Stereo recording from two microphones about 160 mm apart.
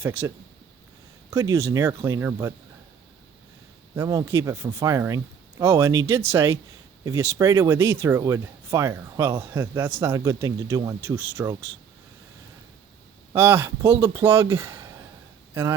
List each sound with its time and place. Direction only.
0.0 s speech: 15° right (ahead or behind)
1.3 s speech: 20° right (ahead or behind)
3.9 s speech: 20° right (ahead or behind)
13.3 s speech: 15° right (ahead or behind)